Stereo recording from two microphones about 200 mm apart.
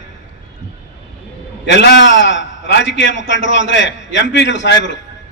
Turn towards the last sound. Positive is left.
turn(degrees=65)  # may be behind; listen again after turning